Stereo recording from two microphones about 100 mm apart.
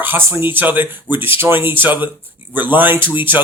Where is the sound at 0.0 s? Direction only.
20° right (ahead or behind).